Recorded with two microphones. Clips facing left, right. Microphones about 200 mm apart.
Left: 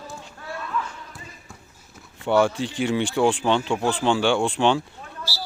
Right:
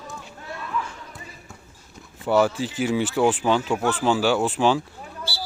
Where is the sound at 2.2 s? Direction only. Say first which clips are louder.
Even; 5° right (ahead or behind).